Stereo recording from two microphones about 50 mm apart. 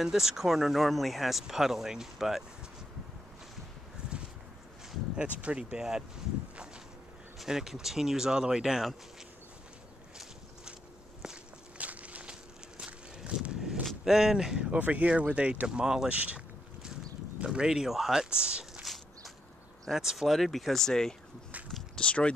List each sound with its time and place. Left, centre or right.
0.0 s speech: centre
5.1 s speech: right
7.3 s speech: centre
11.2 s walk: centre
11.8 s walk: right
14.0 s speech: centre
14.7 s speech: right; by 16.1 s centre
16.1 s speech: right
17.4 s speech: centre
19.9 s speech: centre
22.0 s speech: left